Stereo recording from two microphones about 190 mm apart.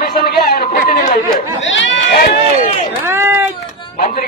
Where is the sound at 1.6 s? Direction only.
80° left.